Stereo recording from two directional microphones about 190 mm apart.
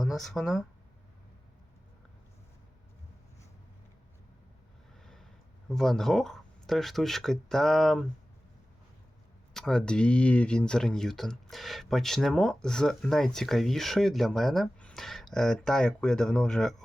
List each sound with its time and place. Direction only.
0.0 s speech: centre (ahead or behind)
5.6 s speech: centre (ahead or behind)
9.5 s speech: 5° left (ahead or behind)